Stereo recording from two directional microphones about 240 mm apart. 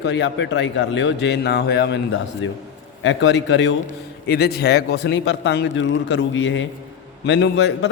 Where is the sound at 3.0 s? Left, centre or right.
Left.